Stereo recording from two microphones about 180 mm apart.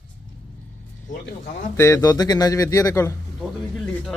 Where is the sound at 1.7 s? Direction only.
15° left (ahead or behind).